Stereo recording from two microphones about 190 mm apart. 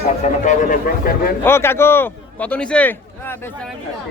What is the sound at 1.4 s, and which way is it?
A man's voice, 10° left (ahead or behind).